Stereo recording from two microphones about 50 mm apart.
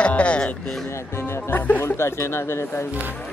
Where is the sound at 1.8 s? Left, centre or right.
Left.